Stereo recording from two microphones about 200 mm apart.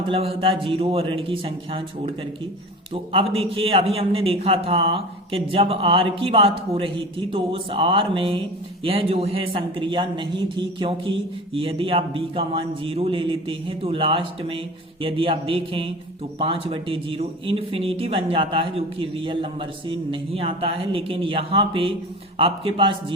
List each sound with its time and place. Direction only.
0.1 s a man's voice: 30° right (ahead or behind)
2.9 s a man's voice: 25° right (ahead or behind)